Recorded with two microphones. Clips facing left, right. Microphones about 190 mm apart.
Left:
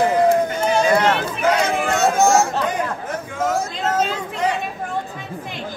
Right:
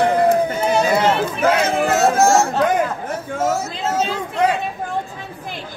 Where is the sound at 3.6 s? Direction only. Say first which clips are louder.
Left 1 dB; 10° right (ahead or behind).